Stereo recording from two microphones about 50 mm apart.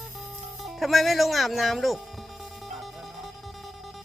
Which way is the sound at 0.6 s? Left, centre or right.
Centre.